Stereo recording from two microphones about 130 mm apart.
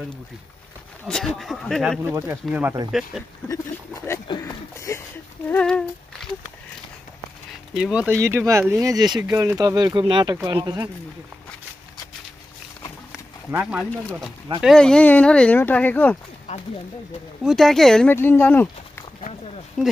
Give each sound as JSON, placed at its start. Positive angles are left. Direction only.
{"t": 1.0, "sound": "speech", "side_deg": 5}
{"t": 2.0, "sound": "speech", "side_deg": -20}
{"t": 2.9, "sound": "speech", "side_deg": 0}
{"t": 4.4, "sound": "speech", "side_deg": 20}
{"t": 5.5, "sound": "speech", "side_deg": 5}
{"t": 7.7, "sound": "speech", "side_deg": -5}
{"t": 8.1, "sound": "speech", "side_deg": -20}
{"t": 13.5, "sound": "speech", "side_deg": -10}
{"t": 14.6, "sound": "speech", "side_deg": 5}
{"t": 17.4, "sound": "speech", "side_deg": 0}
{"t": 18.1, "sound": "speech", "side_deg": 15}
{"t": 19.8, "sound": "speech", "side_deg": 5}